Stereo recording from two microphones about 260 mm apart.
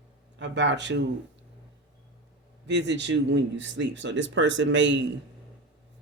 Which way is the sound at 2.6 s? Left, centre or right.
Right.